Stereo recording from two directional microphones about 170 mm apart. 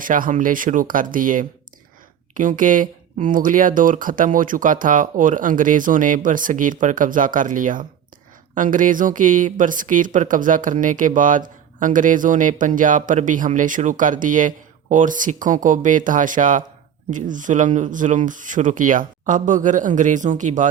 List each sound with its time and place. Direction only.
0.0 s speech: 50° right (ahead or behind)